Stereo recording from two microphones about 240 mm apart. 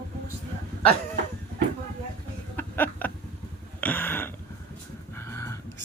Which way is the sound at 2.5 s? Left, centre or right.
Centre.